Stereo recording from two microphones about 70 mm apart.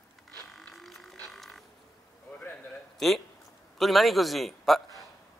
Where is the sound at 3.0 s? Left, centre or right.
Centre.